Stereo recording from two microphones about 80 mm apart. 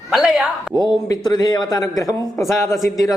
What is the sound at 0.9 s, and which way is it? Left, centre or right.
A man's voice, left.